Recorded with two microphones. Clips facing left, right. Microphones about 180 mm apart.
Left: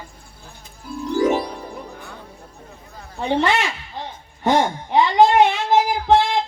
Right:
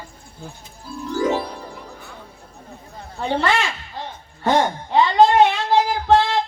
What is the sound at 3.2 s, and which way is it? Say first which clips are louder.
Speech: left 1 dB; 20° left (ahead or behind).